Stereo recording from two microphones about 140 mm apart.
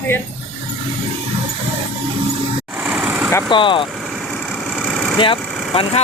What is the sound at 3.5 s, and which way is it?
Speech, 35° left (ahead or behind).